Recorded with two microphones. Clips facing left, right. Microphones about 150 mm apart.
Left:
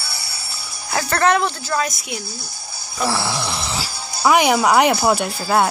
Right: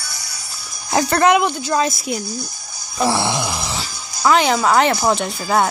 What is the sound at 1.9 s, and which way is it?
Speech, 35° right (ahead or behind).